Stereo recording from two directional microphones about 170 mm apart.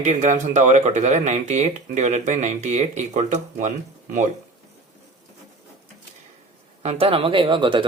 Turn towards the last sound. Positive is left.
turn(degrees=-30)  # may be behind; listen again after turning